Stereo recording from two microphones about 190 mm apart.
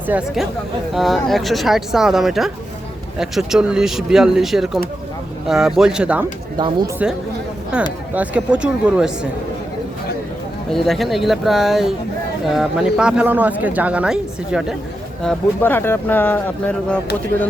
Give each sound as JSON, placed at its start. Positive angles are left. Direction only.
{"t": 0.1, "sound": "speech", "side_deg": -5}
{"t": 6.6, "sound": "speech", "side_deg": -25}
{"t": 7.0, "sound": "speech", "side_deg": -5}
{"t": 10.7, "sound": "speech", "side_deg": 0}
{"t": 15.2, "sound": "speech", "side_deg": 5}